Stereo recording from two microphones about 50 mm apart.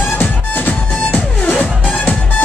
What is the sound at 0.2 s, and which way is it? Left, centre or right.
Music, left.